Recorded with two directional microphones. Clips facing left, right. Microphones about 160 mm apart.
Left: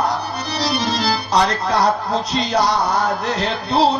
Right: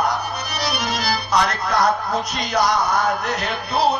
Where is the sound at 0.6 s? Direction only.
30° left (ahead or behind).